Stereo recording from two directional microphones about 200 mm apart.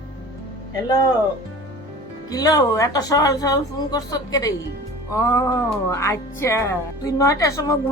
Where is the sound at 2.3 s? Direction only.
20° left (ahead or behind).